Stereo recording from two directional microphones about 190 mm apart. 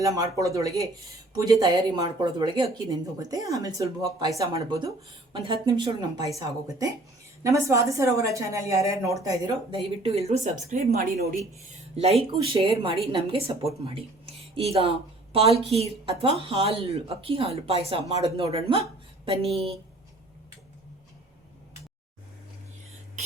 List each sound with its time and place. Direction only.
0.0 s a woman's voice: 15° right (ahead or behind)
10.0 s speech: 35° right (ahead or behind); by 11.3 s 50° right (ahead or behind)
11.9 s speech: 30° right (ahead or behind)